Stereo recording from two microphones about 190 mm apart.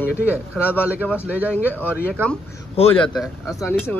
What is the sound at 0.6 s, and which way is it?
Speech, 10° left (ahead or behind).